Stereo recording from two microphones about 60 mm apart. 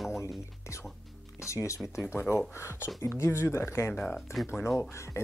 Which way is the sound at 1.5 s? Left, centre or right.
Left.